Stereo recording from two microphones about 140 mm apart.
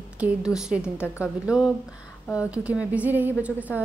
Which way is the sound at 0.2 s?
5° right (ahead or behind).